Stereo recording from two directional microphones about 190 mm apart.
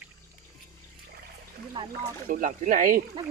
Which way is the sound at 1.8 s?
25° right (ahead or behind).